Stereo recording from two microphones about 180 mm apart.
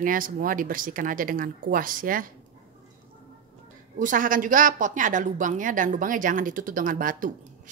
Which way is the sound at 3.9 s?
50° right (ahead or behind).